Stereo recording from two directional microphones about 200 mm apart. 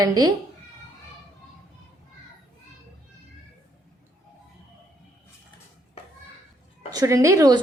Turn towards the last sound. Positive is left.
turn(degrees=-15)  # may be behind; listen again after turning